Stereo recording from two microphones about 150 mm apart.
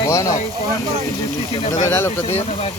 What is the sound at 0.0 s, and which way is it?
Speech, 20° left (ahead or behind).